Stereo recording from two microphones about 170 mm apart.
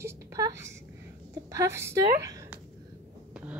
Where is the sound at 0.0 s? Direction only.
15° right (ahead or behind).